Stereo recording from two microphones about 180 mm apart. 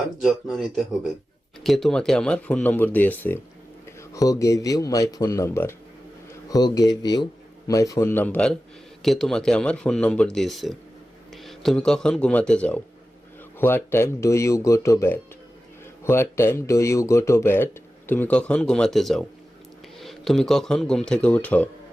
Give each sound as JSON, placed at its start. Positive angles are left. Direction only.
{"t": 0.2, "sound": "speech", "side_deg": 0}